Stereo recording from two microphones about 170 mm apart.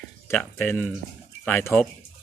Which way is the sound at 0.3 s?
10° left (ahead or behind).